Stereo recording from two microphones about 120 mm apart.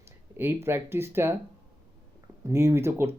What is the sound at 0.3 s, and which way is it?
Speech, 20° right (ahead or behind).